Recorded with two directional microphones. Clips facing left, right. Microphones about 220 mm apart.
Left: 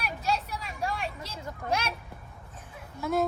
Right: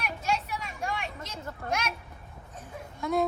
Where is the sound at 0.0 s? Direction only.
35° left (ahead or behind).